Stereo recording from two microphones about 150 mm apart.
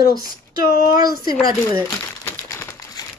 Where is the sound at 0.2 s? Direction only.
90° left.